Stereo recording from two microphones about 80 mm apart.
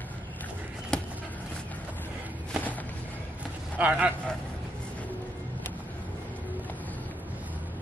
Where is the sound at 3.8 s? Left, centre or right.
Centre.